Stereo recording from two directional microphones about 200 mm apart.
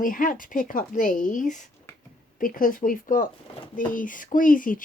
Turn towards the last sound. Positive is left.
turn(degrees=40)  # may be behind; listen again after turning